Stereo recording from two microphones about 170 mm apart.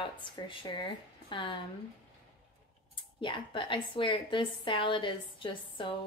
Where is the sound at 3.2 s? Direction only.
30° left (ahead or behind).